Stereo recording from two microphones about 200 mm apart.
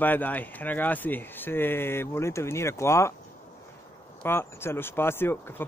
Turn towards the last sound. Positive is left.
turn(degrees=10)  # may be behind; listen again after turning